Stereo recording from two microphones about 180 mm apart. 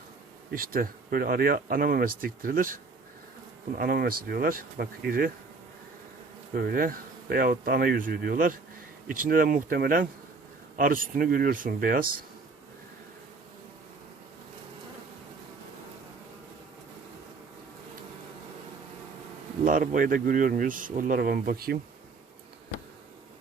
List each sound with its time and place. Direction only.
0.5 s speech: 55° right (ahead or behind)
6.5 s speech: 55° right (ahead or behind)
19.6 s speech: 45° right (ahead or behind)